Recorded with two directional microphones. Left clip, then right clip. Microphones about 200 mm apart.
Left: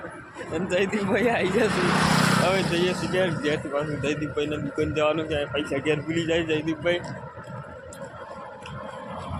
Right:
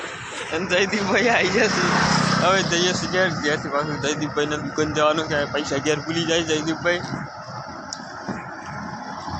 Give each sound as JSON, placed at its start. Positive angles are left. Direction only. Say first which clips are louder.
{"t": 0.7, "sound": "speech", "louder": "right 4 dB", "side_deg": 5}
{"t": 1.7, "sound": "speech", "louder": "right 3 dB", "side_deg": -35}
{"t": 2.4, "sound": "speech", "louder": "right 4 dB", "side_deg": 0}